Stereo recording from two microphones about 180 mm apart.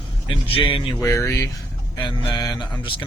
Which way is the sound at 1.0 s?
15° left (ahead or behind).